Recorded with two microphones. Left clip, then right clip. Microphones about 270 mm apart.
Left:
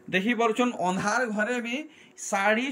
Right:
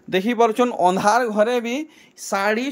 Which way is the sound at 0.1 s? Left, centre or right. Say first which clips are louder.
Right 7 dB; centre.